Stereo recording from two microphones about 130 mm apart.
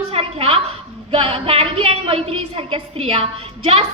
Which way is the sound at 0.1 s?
45° right (ahead or behind).